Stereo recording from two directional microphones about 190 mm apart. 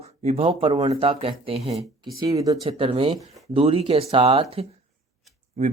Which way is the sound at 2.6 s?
30° right (ahead or behind).